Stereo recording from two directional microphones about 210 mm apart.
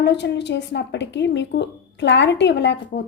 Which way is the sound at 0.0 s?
55° left (ahead or behind).